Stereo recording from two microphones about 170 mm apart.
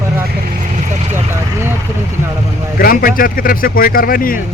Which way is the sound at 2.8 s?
60° left (ahead or behind).